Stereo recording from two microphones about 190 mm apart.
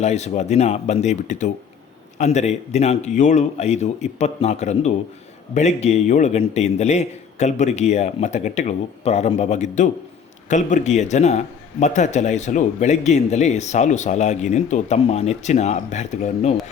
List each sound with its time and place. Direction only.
0.0 s a man's voice: 35° left (ahead or behind)